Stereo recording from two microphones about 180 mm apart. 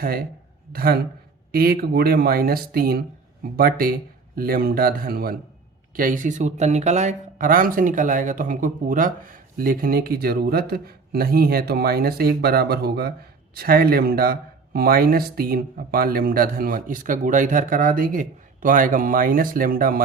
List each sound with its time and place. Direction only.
0.0 s speech: 55° right (ahead or behind)